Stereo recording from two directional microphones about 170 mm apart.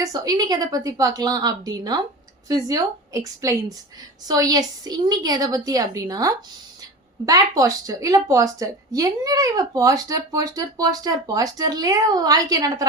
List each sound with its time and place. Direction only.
0.0 s a woman's voice: 20° right (ahead or behind)